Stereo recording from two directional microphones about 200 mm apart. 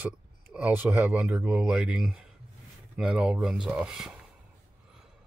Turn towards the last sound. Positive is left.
turn(degrees=-5)  # may be behind; listen again after turning